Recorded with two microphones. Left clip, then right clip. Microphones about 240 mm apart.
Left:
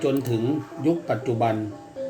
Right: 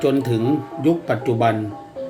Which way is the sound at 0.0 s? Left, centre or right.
Right.